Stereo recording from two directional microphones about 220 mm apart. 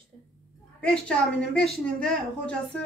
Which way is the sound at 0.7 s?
5° left (ahead or behind).